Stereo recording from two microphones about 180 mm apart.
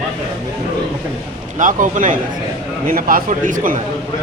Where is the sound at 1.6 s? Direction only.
45° right (ahead or behind).